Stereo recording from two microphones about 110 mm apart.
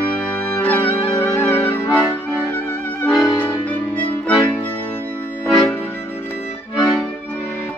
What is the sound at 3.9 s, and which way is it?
Music, 15° left (ahead or behind).